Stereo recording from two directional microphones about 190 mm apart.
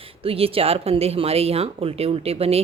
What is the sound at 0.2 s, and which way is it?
Speech, 30° right (ahead or behind).